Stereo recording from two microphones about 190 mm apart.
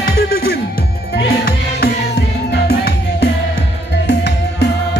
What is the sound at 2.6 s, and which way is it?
Music, 60° left (ahead or behind).